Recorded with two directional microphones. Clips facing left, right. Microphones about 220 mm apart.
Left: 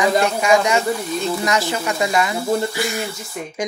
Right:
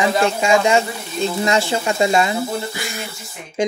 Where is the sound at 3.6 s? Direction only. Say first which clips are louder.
Right 6 dB; 25° right (ahead or behind).